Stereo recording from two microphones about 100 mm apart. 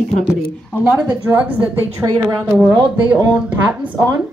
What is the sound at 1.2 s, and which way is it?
A woman's voice, 15° right (ahead or behind).